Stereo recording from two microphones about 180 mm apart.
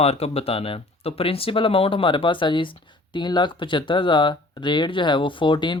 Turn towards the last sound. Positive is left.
turn(degrees=25)  # may be behind; listen again after turning